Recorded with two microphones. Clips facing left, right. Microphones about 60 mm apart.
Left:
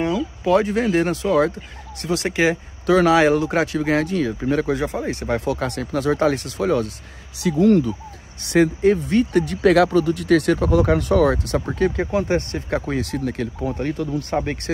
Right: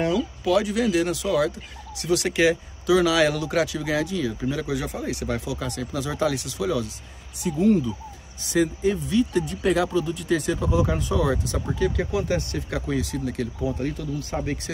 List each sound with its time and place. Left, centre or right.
0.4 s speech: left
2.9 s speech: left
5.5 s speech: left
7.3 s speech: left
8.4 s speech: left
12.0 s speech: left
13.0 s speech: left